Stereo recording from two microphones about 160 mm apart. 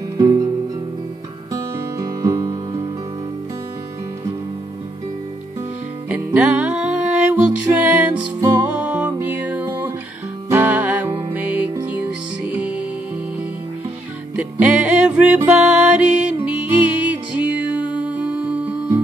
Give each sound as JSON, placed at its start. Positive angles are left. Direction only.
{"t": 0.2, "sound": "music", "side_deg": -25}
{"t": 1.5, "sound": "music", "side_deg": -20}
{"t": 6.0, "sound": "music", "side_deg": -10}
{"t": 14.3, "sound": "music", "side_deg": -5}